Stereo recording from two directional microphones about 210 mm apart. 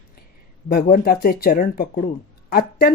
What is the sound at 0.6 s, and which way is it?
Speech, 45° left (ahead or behind).